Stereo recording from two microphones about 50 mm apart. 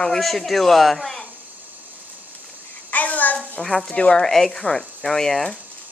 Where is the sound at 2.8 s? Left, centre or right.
Left.